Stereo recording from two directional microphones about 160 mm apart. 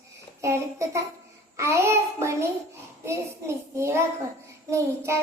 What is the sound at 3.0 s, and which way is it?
Speech, 20° right (ahead or behind).